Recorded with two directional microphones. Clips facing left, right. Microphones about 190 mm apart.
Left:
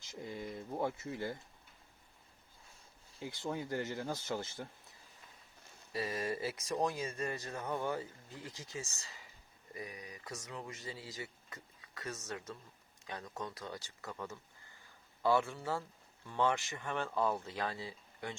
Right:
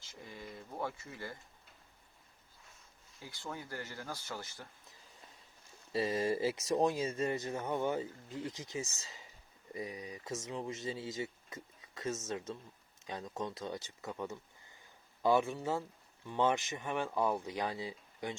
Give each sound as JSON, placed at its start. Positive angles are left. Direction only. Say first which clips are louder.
{"t": 0.0, "sound": "speech", "louder": "left 6 dB", "side_deg": 15}
{"t": 3.2, "sound": "speech", "louder": "left 6 dB", "side_deg": 20}
{"t": 5.9, "sound": "speech", "louder": "right 5 dB", "side_deg": -25}